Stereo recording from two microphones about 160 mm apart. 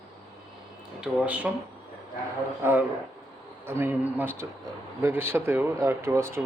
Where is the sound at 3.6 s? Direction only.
15° right (ahead or behind).